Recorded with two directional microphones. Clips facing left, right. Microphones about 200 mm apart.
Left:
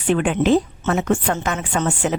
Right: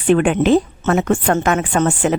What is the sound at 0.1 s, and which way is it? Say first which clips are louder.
Speech: right 4 dB; 60° right (ahead or behind).